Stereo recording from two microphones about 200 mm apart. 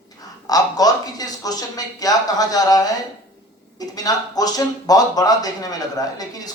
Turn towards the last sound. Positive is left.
turn(degrees=20)  # may be behind; listen again after turning